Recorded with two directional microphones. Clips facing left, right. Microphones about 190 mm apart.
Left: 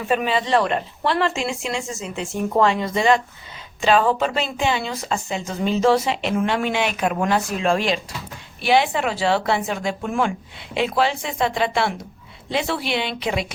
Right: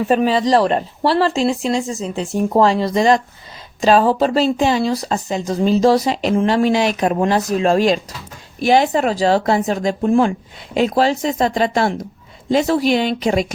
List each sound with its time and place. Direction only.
0.0 s speech: 35° right (ahead or behind)